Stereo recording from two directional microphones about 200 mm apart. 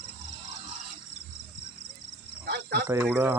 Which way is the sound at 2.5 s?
55° right (ahead or behind).